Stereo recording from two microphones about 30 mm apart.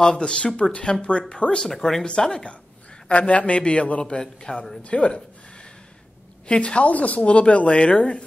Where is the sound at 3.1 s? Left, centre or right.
Left.